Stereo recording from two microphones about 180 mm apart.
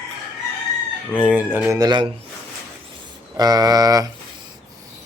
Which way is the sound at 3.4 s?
20° right (ahead or behind).